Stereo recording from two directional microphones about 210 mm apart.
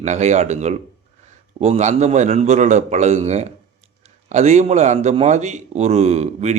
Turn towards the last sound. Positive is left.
turn(degrees=-30)  # may be behind; listen again after turning